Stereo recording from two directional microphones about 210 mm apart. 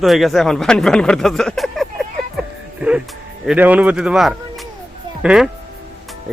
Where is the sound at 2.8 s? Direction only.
5° right (ahead or behind).